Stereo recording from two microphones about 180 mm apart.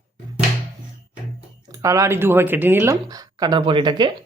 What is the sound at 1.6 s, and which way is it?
Speech, 20° right (ahead or behind).